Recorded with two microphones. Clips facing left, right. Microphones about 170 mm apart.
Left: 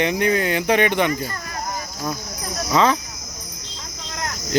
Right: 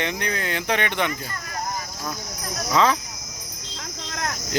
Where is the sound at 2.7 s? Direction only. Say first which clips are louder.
Left 2 dB; centre (ahead or behind).